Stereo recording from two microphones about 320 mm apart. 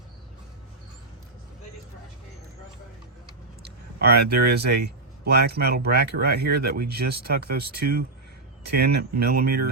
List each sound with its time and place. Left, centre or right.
3.6 s speech: right